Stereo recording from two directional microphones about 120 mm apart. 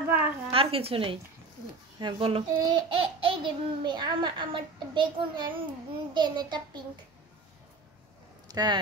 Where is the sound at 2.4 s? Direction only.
35° right (ahead or behind).